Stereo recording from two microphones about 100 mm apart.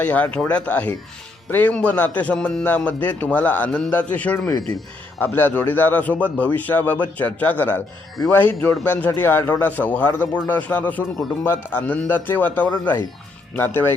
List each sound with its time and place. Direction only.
0.0 s a man's voice: 15° left (ahead or behind)